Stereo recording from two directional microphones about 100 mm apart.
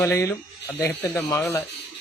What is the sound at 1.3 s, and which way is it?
Speech, 20° left (ahead or behind).